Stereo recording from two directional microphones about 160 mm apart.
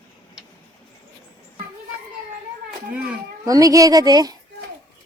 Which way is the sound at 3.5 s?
20° right (ahead or behind).